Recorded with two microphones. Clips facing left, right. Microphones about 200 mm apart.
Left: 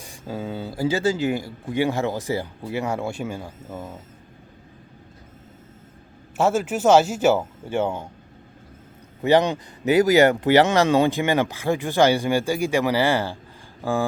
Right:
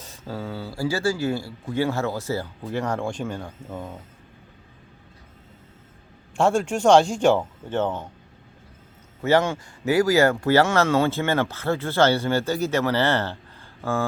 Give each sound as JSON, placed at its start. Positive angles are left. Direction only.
{"t": 0.0, "sound": "speech", "side_deg": 15}
{"t": 6.3, "sound": "speech", "side_deg": 5}
{"t": 9.2, "sound": "speech", "side_deg": 15}